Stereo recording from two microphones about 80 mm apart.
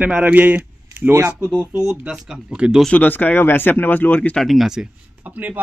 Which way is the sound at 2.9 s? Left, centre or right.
Centre.